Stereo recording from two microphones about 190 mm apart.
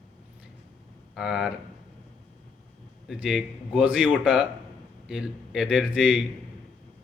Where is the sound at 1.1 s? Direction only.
Centre (ahead or behind).